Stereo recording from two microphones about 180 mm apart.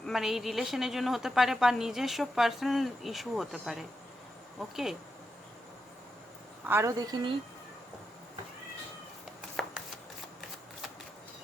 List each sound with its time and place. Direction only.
0.0 s a woman's voice: centre (ahead or behind)
6.7 s a woman's voice: 15° right (ahead or behind)